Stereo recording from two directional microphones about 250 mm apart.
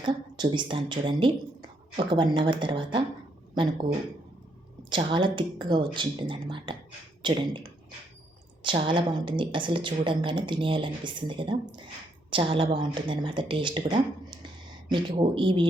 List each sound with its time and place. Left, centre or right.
0.0 s a woman's voice: centre
4.9 s a woman's voice: centre